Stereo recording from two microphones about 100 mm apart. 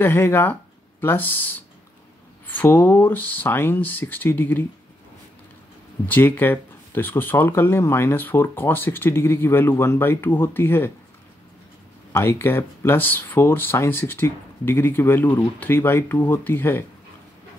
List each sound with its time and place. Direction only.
0.0 s speech: 20° left (ahead or behind)
6.0 s speech: 20° left (ahead or behind)
12.1 s speech: 25° left (ahead or behind)